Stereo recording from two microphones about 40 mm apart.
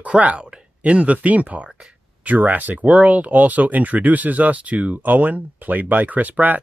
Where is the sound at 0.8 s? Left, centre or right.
Right.